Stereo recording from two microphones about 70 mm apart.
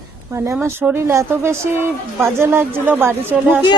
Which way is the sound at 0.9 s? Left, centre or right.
Right.